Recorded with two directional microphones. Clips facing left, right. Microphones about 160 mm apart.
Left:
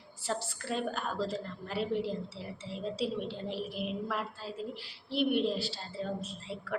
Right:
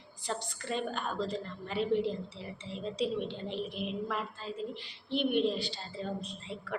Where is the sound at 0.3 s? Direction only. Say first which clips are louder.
Left 1 dB; 5° left (ahead or behind).